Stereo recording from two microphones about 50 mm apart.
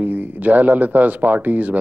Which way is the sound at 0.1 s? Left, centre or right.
Right.